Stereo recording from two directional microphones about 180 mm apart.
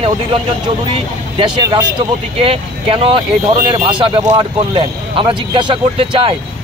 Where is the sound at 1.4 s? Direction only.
20° right (ahead or behind).